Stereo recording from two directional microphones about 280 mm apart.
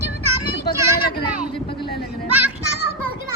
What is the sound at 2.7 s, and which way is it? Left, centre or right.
Children playing, left.